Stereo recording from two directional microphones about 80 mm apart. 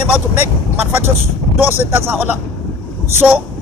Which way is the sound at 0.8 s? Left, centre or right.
Right.